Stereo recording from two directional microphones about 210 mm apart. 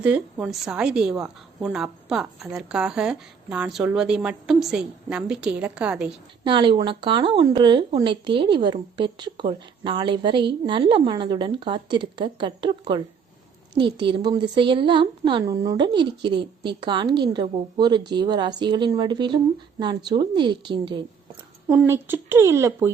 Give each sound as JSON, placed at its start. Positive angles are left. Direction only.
{"t": 0.0, "sound": "a woman's voice", "side_deg": -5}
{"t": 6.4, "sound": "a woman's voice", "side_deg": -25}
{"t": 21.7, "sound": "speech", "side_deg": -10}